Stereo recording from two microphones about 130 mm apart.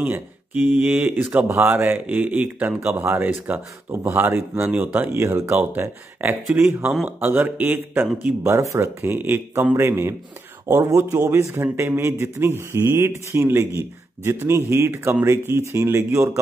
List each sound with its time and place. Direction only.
0.0 s a man's voice: 15° right (ahead or behind)